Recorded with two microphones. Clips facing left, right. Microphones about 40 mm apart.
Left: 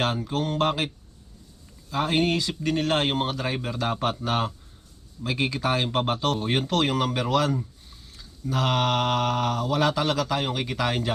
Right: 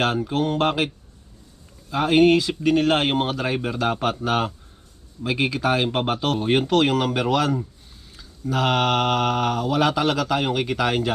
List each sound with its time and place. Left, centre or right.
0.0 s mantra: right
1.9 s speech: centre